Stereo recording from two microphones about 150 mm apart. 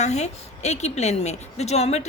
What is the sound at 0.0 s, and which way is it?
A woman's voice, 50° left (ahead or behind).